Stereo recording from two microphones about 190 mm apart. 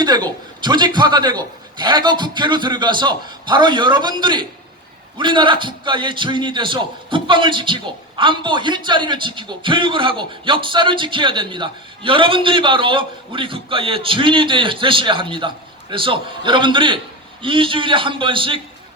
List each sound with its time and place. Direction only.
0.0 s a man's voice: 20° right (ahead or behind)